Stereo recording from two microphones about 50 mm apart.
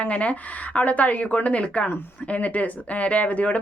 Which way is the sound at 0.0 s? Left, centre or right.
Left.